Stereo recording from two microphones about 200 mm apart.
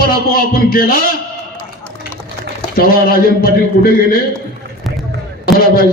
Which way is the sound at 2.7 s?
45° left (ahead or behind).